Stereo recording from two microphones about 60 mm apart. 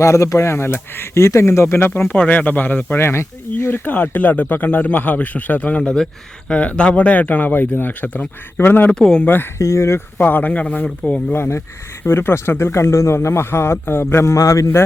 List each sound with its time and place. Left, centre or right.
0.0 s speech: left
1.1 s speech: left
2.1 s speech: left
3.0 s speech: left
3.8 s speech: left
5.8 s speech: centre; by 8.9 s left
8.9 s speech: centre
9.2 s speech: left
9.6 s speech: left
10.2 s speech: left
11.3 s speech: left
12.0 s speech: left
14.3 s speech: left